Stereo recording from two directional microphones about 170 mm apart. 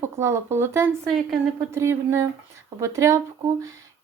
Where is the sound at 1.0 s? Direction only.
Centre (ahead or behind).